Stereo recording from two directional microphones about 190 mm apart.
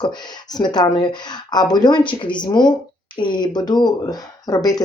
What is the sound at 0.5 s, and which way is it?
Speech, 20° left (ahead or behind).